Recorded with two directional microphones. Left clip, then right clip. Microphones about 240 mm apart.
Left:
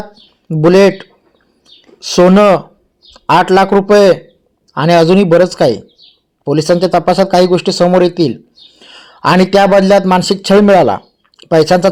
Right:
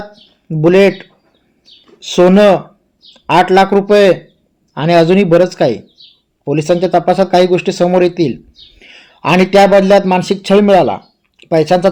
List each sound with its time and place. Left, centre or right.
0.4 s a man's voice: centre